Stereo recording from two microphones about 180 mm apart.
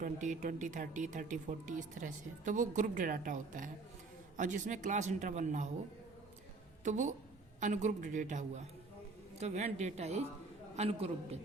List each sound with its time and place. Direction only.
0.0 s speech: 45° right (ahead or behind)
6.8 s a woman's voice: 45° right (ahead or behind)